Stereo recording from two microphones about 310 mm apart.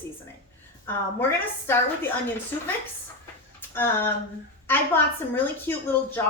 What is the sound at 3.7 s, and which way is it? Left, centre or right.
A woman's voice, centre.